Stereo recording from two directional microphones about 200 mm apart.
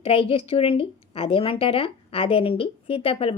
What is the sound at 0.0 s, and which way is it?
A woman's voice, 30° left (ahead or behind).